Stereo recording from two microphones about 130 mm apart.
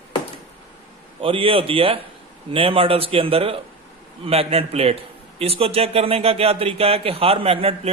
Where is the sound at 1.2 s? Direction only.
45° right (ahead or behind).